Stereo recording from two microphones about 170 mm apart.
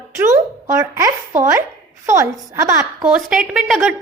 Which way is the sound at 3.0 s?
5° right (ahead or behind).